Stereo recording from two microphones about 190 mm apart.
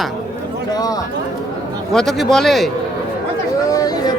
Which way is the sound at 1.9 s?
Centre (ahead or behind).